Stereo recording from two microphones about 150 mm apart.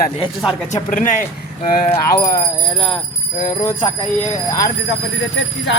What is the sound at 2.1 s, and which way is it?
Speech, 75° left (ahead or behind).